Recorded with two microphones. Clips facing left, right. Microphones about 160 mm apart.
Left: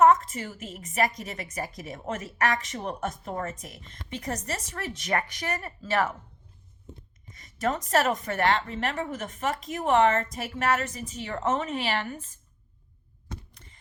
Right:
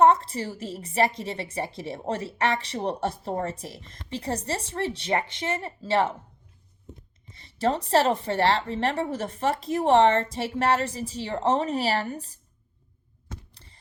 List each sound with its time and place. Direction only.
0.0 s a woman's voice: 30° right (ahead or behind)
7.3 s a woman's voice: 30° right (ahead or behind)
13.5 s a sound: 30° right (ahead or behind)